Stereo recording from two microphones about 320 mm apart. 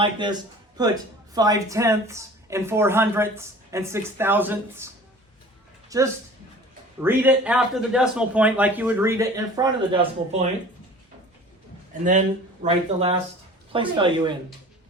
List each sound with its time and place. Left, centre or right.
0.0 s speech: centre
5.9 s speech: centre
12.6 s speech: centre